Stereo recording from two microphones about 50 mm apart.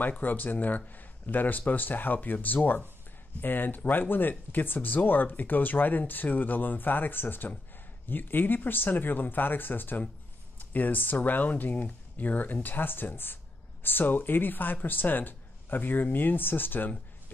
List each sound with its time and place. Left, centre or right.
0.0 s speech: left